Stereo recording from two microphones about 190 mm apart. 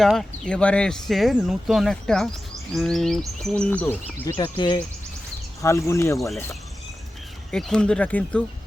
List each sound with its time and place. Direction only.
0.0 s speech: centre (ahead or behind)
4.5 s speech: 25° left (ahead or behind)
6.1 s speech: centre (ahead or behind)
7.5 s speech: 5° left (ahead or behind)